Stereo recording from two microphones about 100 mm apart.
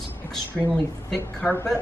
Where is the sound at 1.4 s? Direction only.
20° left (ahead or behind).